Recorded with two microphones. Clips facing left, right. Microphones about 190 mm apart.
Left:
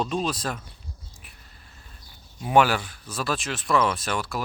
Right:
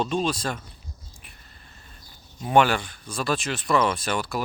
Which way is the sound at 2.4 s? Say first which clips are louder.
Even; 5° left (ahead or behind).